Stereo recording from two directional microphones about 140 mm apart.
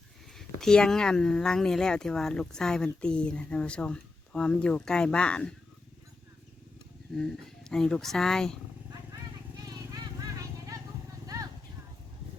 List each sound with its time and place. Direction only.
0.3 s speech: 5° left (ahead or behind)
7.1 s speech: 5° left (ahead or behind)
9.6 s vehicle: 25° right (ahead or behind)